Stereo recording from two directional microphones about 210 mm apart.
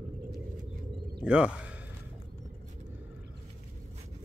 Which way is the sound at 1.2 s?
5° right (ahead or behind).